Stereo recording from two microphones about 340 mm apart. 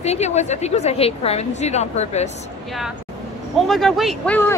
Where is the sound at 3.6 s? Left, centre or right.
Centre.